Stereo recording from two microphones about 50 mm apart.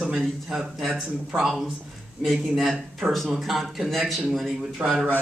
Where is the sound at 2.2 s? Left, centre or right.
Centre.